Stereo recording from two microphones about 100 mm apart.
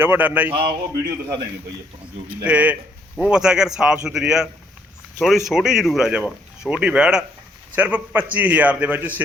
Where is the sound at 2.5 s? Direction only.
15° right (ahead or behind).